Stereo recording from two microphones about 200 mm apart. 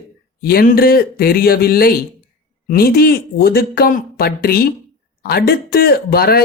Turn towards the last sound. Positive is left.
turn(degrees=50)  # may be behind; listen again after turning